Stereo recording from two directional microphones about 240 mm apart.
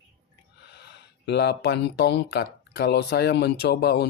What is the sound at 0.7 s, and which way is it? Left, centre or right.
Speech, left.